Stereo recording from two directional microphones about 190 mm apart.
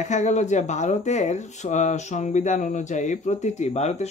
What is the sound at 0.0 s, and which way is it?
Speech, 40° left (ahead or behind).